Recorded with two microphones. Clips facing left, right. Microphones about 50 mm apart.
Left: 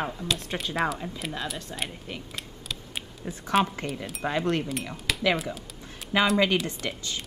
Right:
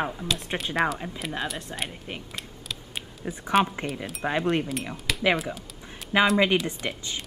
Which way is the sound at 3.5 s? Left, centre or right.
Centre.